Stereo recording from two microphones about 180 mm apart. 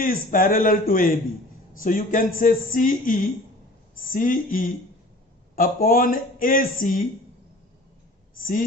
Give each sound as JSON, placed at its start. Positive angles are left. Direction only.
{"t": 0.1, "sound": "a man's voice", "side_deg": 50}